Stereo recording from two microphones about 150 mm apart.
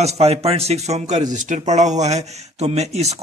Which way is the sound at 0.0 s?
45° right (ahead or behind).